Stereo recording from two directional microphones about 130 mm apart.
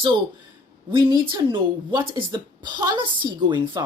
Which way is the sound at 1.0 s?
35° right (ahead or behind).